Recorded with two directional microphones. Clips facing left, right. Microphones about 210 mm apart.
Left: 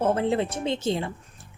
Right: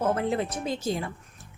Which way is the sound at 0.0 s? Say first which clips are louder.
Left 3 dB; 30° left (ahead or behind).